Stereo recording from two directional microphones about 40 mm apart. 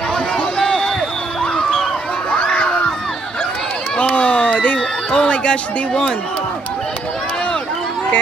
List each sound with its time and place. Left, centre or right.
0.6 s a sound: centre
2.3 s crowd: left
4.0 s run: left
4.7 s speech: left